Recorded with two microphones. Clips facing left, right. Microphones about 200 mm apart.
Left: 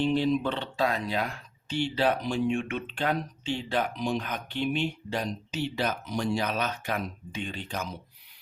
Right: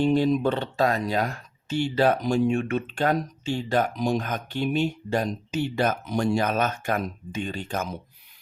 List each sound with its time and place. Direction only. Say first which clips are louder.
0.0 s speech: right 4 dB; 45° right (ahead or behind)